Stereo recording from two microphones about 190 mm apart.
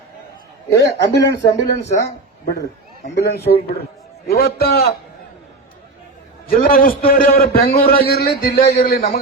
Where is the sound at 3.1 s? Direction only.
65° left (ahead or behind).